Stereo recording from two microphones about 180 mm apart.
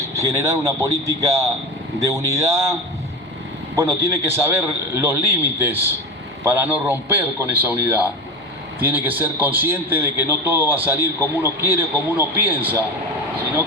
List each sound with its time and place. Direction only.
0.2 s a man's voice: 20° right (ahead or behind)
3.8 s a man's voice: 15° right (ahead or behind)